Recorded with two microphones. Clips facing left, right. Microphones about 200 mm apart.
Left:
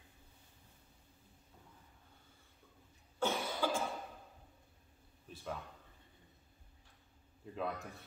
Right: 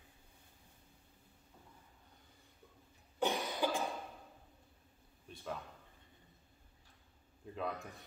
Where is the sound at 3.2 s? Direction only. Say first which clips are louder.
Right 1 dB; 15° right (ahead or behind).